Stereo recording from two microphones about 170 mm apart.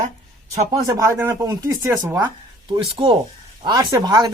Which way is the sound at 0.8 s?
20° right (ahead or behind).